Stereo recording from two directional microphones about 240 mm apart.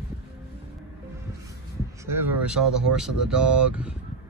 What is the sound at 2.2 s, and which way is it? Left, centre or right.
Speech, centre.